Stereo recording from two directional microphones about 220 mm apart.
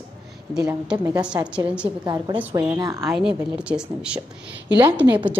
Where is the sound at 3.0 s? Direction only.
Centre (ahead or behind).